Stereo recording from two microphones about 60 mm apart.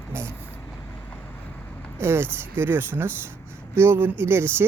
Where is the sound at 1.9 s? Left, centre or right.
Right.